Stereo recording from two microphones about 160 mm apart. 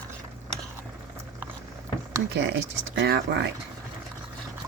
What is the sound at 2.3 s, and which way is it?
Speech, 90° right.